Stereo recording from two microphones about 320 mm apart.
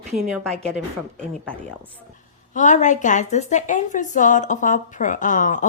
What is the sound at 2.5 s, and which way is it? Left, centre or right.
A woman's voice, left.